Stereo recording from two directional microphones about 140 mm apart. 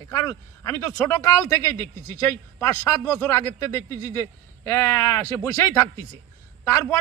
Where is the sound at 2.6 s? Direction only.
20° left (ahead or behind).